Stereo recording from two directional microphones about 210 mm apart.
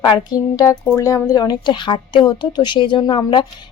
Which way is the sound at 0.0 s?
20° left (ahead or behind).